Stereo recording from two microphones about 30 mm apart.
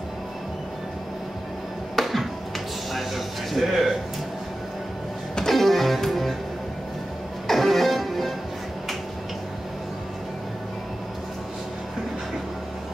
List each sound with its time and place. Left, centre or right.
2.0 s music: centre
2.9 s a sound: centre
5.4 s music: centre
7.4 s music: centre